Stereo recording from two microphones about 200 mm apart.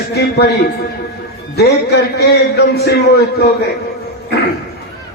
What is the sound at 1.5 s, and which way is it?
A man's voice, 55° left (ahead or behind).